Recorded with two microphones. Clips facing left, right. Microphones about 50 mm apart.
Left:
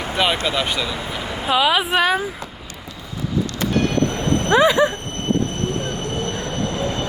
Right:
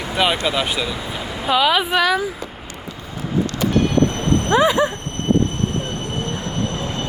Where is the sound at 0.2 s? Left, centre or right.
Centre.